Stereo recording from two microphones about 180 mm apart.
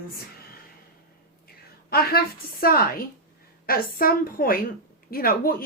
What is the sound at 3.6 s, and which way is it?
A woman's voice, 55° left (ahead or behind).